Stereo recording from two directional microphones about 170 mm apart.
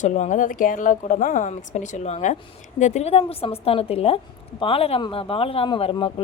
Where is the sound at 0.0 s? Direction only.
45° left (ahead or behind).